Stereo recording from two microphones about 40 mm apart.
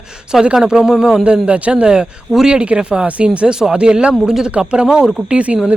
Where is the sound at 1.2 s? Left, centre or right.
Right; by 2.6 s centre.